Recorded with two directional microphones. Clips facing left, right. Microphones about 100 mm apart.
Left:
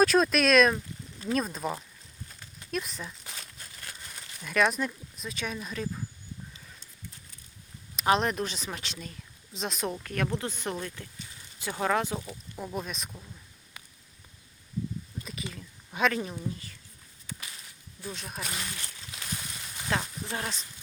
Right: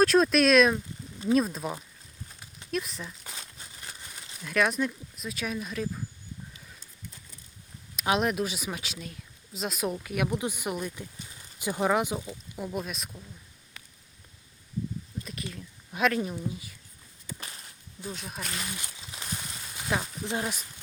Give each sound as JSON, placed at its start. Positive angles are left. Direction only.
{"t": 0.0, "sound": "speech", "side_deg": 0}
{"t": 3.3, "sound": "a sound", "side_deg": -15}
{"t": 4.1, "sound": "speech", "side_deg": -5}
{"t": 7.9, "sound": "speech", "side_deg": -5}
{"t": 12.5, "sound": "speech", "side_deg": -5}
{"t": 15.2, "sound": "speech", "side_deg": 0}
{"t": 18.1, "sound": "speech", "side_deg": 0}
{"t": 18.7, "sound": "speech", "side_deg": -15}